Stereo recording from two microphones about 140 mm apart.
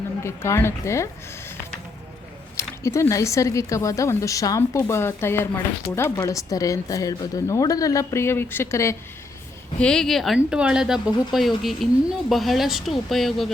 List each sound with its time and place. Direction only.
0.2 s speech: 20° left (ahead or behind)
2.6 s speech: 20° left (ahead or behind)
9.8 s speech: 5° left (ahead or behind)